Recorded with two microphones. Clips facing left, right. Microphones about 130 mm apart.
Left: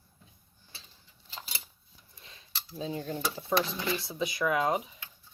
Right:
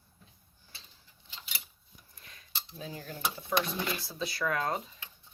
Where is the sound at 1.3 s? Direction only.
35° left (ahead or behind).